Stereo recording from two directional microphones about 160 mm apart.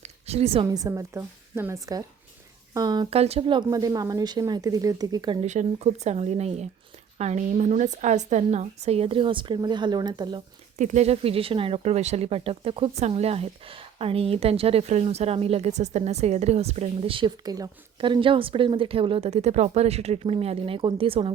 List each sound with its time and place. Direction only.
0.0 s a sound: 40° right (ahead or behind)
0.6 s a woman's voice: 25° right (ahead or behind)
3.2 s a woman's voice: 40° right (ahead or behind)
5.4 s speech: 45° right (ahead or behind); by 10.4 s 25° right (ahead or behind)
10.8 s speech: 45° right (ahead or behind)